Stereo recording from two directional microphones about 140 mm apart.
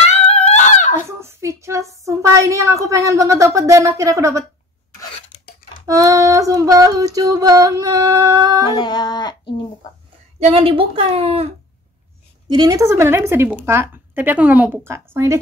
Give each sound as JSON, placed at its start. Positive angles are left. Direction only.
{"t": 0.0, "sound": "a sound", "side_deg": 50}
{"t": 1.0, "sound": "speech", "side_deg": -20}
{"t": 5.9, "sound": "speech", "side_deg": -25}
{"t": 8.7, "sound": "speech", "side_deg": 30}
{"t": 10.5, "sound": "speech", "side_deg": -40}
{"t": 12.4, "sound": "a woman's voice", "side_deg": -30}